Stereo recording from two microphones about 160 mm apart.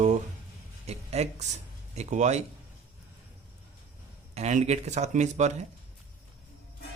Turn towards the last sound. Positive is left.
turn(degrees=-45)  # may be behind; listen again after turning